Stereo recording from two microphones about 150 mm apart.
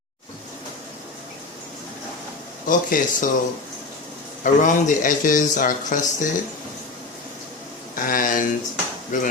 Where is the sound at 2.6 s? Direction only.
60° left (ahead or behind).